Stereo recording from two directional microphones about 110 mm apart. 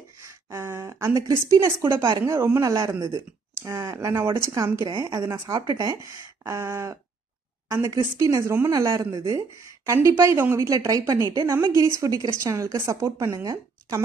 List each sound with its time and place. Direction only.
0.2 s a woman's voice: 25° right (ahead or behind)